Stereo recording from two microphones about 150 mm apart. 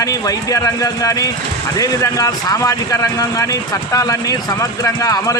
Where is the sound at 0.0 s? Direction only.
25° left (ahead or behind).